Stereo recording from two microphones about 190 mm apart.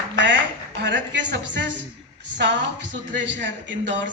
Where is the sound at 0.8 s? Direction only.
70° right (ahead or behind).